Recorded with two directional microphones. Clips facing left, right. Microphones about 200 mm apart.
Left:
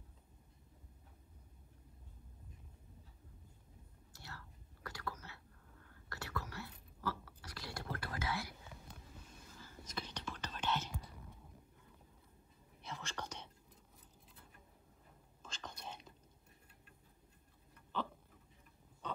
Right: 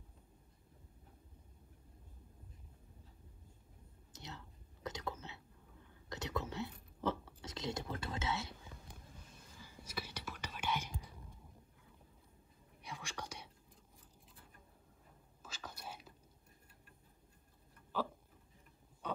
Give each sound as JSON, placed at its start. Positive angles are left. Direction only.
{"t": 4.1, "sound": "whispering", "side_deg": -20}
{"t": 9.6, "sound": "whispering", "side_deg": -10}
{"t": 12.8, "sound": "whispering", "side_deg": -10}
{"t": 15.4, "sound": "whispering", "side_deg": -5}
{"t": 17.9, "sound": "hiccup", "side_deg": -5}